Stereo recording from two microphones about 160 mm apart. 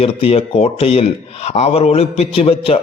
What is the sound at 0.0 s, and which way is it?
A man's voice, 40° left (ahead or behind).